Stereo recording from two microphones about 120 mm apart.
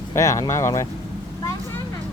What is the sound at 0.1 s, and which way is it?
Speech, 25° left (ahead or behind).